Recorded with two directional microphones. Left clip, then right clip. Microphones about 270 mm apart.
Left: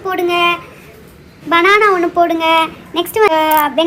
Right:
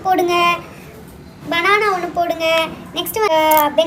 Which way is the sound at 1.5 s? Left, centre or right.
Centre.